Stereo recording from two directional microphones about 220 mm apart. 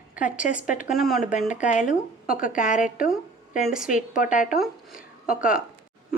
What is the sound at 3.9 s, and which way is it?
Speech, 35° left (ahead or behind).